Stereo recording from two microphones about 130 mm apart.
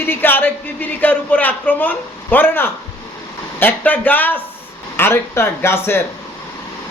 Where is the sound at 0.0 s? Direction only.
15° left (ahead or behind).